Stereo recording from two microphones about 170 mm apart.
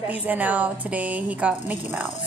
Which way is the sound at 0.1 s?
10° right (ahead or behind).